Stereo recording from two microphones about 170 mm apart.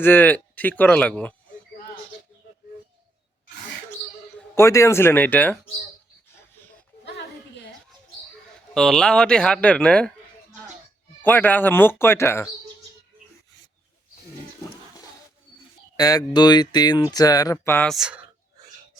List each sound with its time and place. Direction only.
0.0 s speech: 10° left (ahead or behind)
4.4 s speech: 15° left (ahead or behind)
8.7 s a man's voice: 5° left (ahead or behind)
11.2 s speech: 10° left (ahead or behind)
16.0 s speech: 20° left (ahead or behind)
17.9 s a man's voice: 5° right (ahead or behind)